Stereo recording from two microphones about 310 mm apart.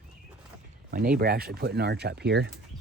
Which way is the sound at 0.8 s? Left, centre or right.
Right.